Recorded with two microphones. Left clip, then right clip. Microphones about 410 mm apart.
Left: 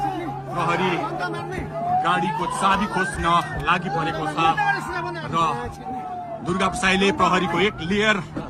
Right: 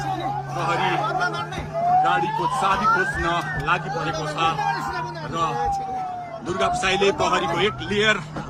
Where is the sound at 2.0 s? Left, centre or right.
Centre.